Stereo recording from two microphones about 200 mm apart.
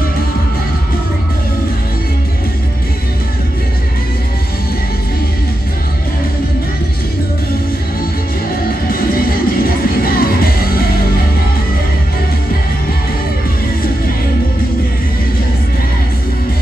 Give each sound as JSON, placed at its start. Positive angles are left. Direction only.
{"t": 8.8, "sound": "music", "side_deg": 50}